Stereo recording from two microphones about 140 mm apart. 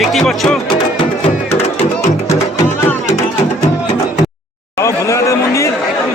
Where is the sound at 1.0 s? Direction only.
45° left (ahead or behind).